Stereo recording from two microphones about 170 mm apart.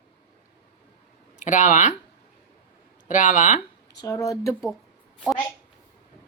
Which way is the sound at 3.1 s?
50° left (ahead or behind).